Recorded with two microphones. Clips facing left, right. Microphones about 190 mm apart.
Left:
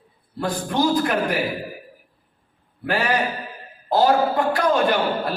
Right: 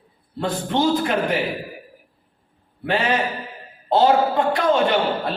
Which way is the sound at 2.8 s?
25° right (ahead or behind).